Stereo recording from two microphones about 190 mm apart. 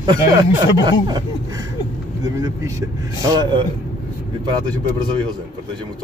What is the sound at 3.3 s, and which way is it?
Speech, 25° right (ahead or behind).